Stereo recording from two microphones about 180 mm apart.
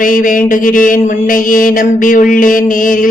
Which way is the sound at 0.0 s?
50° left (ahead or behind).